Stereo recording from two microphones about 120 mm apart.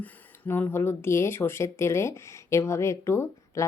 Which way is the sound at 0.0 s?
15° left (ahead or behind).